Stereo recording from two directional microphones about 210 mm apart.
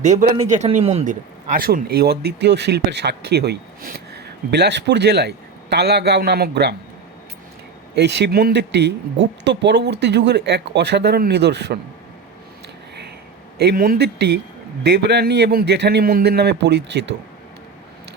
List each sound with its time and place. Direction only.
0.0 s a man's voice: 35° right (ahead or behind); by 6.7 s 50° right (ahead or behind)
7.9 s a man's voice: 55° right (ahead or behind)
13.6 s a man's voice: 45° right (ahead or behind)